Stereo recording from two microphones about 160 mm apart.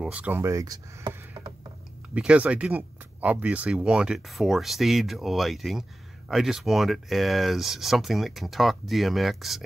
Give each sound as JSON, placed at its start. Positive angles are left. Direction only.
{"t": 0.0, "sound": "speech", "side_deg": -10}
{"t": 2.1, "sound": "speech", "side_deg": -10}